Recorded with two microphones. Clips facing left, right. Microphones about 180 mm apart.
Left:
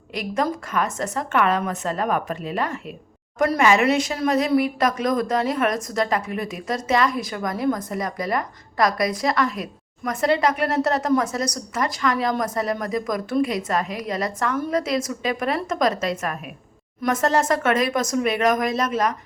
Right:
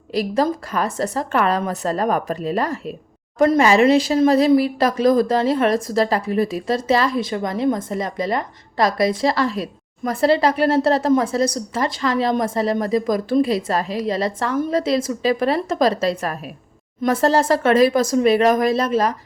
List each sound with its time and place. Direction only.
0.1 s a woman's voice: 35° right (ahead or behind)